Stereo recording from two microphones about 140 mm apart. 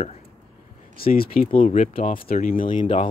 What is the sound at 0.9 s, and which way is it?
Speech, 90° left.